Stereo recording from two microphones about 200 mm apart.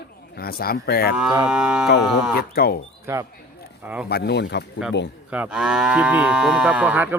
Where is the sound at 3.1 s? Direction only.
15° right (ahead or behind).